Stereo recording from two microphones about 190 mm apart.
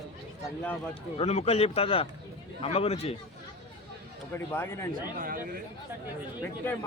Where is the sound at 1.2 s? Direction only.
35° left (ahead or behind).